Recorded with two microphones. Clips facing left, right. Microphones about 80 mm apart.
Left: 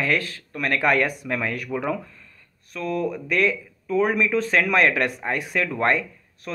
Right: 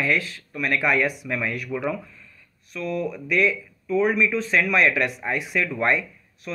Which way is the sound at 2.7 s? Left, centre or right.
Left.